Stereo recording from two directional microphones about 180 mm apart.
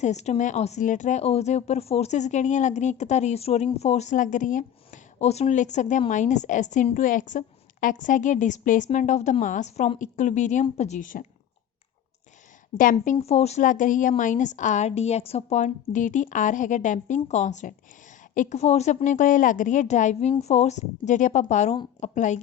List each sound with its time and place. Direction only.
0.0 s a woman's voice: 40° left (ahead or behind)
12.7 s a woman's voice: 50° left (ahead or behind)
13.1 s a woman's voice: 35° left (ahead or behind)